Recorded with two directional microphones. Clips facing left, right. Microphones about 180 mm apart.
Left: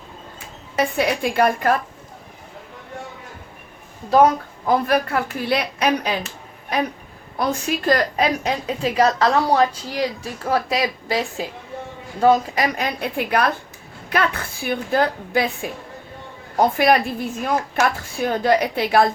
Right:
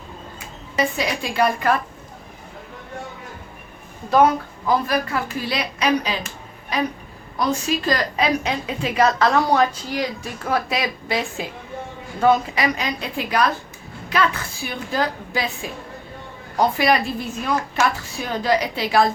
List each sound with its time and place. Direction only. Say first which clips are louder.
0.8 s speech: left 3 dB; 55° left (ahead or behind)
4.1 s a woman's voice: left 1 dB; 40° left (ahead or behind); by 19.0 s 55° left (ahead or behind)